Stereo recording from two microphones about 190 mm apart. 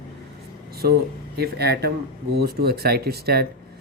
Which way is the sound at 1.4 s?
55° right (ahead or behind).